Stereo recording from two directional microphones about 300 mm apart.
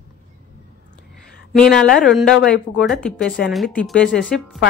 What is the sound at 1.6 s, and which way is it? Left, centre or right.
Speech, centre.